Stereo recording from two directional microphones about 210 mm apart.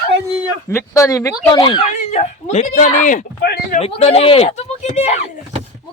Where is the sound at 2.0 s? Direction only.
35° left (ahead or behind).